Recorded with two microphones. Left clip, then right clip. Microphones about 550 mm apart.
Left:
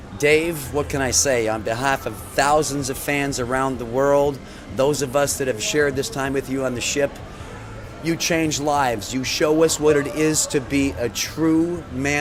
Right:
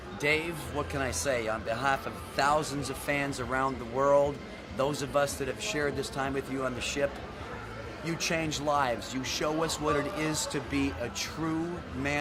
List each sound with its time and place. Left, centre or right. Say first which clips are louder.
0.2 s speech: left 11 dB; left